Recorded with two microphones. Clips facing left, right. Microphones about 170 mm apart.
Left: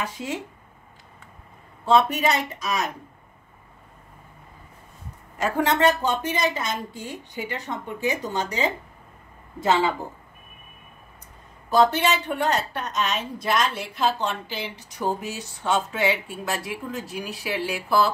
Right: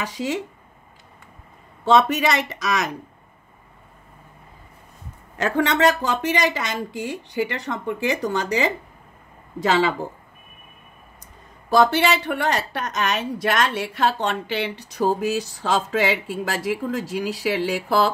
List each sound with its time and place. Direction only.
0.0 s speech: 90° right
1.9 s speech: 80° right
5.4 s speech: 75° right (ahead or behind)
11.7 s speech: 80° right